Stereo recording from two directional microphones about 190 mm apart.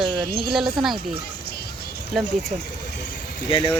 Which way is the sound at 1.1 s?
55° left (ahead or behind).